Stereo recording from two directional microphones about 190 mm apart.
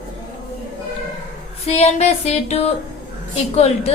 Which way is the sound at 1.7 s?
35° left (ahead or behind).